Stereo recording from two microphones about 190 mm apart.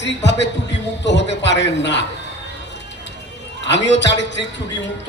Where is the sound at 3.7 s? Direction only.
65° left (ahead or behind).